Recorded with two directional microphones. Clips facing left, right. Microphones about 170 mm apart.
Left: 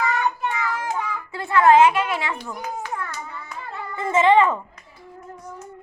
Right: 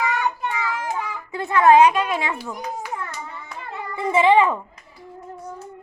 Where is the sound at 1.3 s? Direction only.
20° right (ahead or behind).